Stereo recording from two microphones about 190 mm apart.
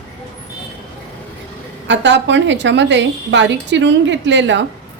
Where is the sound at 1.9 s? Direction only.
70° right (ahead or behind).